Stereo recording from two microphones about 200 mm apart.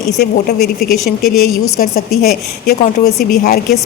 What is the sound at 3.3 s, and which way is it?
Speech, 50° left (ahead or behind).